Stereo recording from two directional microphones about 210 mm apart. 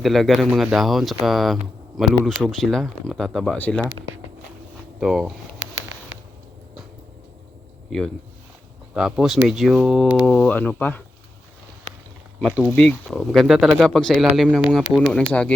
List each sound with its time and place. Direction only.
0.0 s speech: centre (ahead or behind)
4.9 s speech: 5° right (ahead or behind)
5.5 s a sound: 60° right (ahead or behind)
7.9 s speech: centre (ahead or behind)
12.4 s speech: 5° left (ahead or behind)